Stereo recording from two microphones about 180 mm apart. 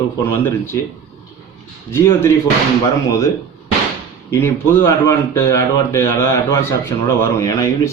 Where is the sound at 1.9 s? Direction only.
15° left (ahead or behind).